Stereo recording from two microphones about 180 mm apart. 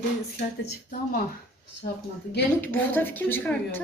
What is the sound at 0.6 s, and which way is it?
Speech, 55° left (ahead or behind).